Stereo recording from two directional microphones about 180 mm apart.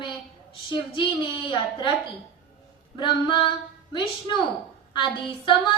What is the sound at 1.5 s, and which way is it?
Speech, 25° left (ahead or behind).